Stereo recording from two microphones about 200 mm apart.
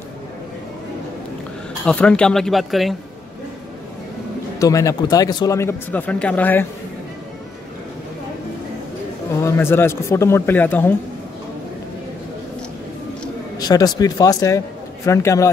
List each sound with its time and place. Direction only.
1.9 s speech: 5° left (ahead or behind)
4.6 s speech: 15° left (ahead or behind)
9.4 s speech: 10° left (ahead or behind)
13.6 s speech: 20° left (ahead or behind)